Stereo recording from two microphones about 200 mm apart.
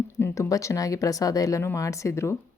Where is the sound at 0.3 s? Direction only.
15° left (ahead or behind).